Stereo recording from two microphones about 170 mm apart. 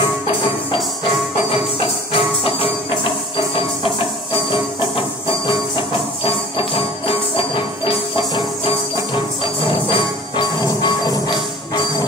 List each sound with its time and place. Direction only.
1.5 s music: 30° left (ahead or behind)
4.5 s music: 30° left (ahead or behind)
6.2 s music: 30° left (ahead or behind)